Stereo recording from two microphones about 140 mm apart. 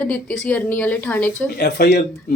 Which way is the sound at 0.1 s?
10° left (ahead or behind).